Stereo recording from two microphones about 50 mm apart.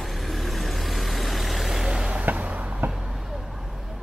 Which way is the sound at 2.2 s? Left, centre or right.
Right.